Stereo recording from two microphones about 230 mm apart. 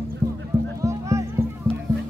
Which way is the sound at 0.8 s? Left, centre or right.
Centre.